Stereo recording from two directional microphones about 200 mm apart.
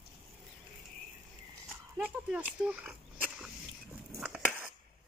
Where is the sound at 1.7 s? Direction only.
5° right (ahead or behind).